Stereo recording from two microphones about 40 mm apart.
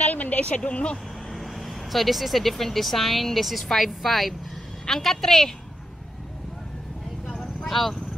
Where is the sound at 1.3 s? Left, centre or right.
Centre.